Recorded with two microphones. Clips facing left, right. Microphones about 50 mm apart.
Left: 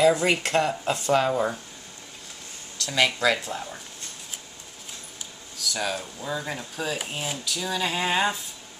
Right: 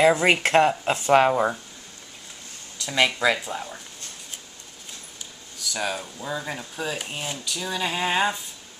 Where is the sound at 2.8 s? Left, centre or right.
Centre.